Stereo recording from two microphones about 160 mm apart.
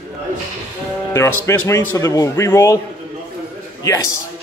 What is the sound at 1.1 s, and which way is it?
A man's voice, 15° left (ahead or behind).